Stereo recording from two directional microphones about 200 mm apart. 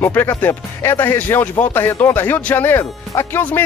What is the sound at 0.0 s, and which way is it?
Speech, 10° left (ahead or behind).